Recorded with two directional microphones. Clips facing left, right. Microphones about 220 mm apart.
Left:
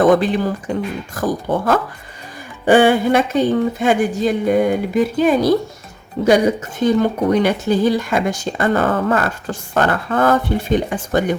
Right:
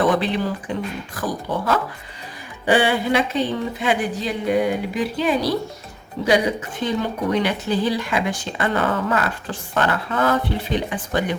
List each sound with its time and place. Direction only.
0.0 s speech: 45° left (ahead or behind)